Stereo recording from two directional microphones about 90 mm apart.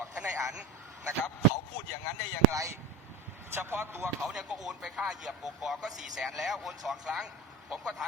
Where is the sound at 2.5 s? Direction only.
35° right (ahead or behind).